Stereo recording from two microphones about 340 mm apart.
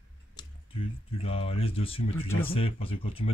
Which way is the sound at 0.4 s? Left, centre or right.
Centre.